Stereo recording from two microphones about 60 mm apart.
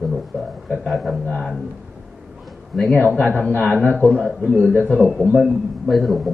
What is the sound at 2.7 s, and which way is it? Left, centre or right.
Speech, centre.